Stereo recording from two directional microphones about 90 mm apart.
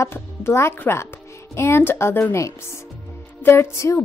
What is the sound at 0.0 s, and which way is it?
Speech, 30° left (ahead or behind).